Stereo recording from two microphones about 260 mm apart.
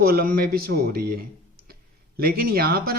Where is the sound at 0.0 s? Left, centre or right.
Right.